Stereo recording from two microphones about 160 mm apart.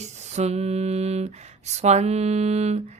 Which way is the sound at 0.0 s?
45° right (ahead or behind).